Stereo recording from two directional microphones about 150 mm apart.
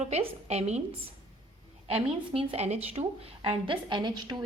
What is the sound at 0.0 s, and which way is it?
Speech, 45° right (ahead or behind).